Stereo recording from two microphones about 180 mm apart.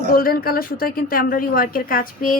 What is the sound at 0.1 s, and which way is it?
A woman's voice, 55° left (ahead or behind).